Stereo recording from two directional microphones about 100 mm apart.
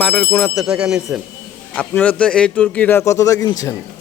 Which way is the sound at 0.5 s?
5° right (ahead or behind).